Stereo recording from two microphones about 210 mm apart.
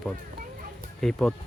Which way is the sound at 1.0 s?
5° left (ahead or behind).